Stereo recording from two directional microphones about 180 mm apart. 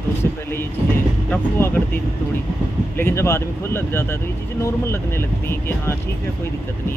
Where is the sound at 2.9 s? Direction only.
15° left (ahead or behind).